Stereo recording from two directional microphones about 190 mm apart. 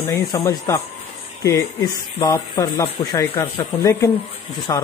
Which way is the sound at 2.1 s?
15° left (ahead or behind).